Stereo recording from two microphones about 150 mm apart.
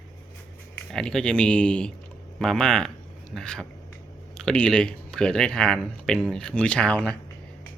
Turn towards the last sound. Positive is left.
turn(degrees=5)  # may be behind; listen again after turning